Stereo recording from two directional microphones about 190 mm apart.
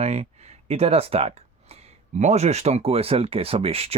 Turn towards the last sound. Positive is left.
turn(degrees=-30)  # may be behind; listen again after turning